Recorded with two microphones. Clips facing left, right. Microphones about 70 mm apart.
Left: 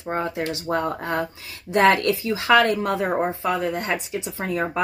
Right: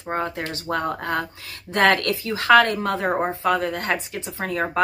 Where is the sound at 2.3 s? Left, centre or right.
Right.